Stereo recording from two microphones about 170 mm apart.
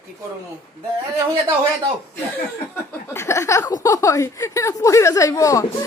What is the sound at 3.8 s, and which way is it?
A woman's voice, 20° left (ahead or behind).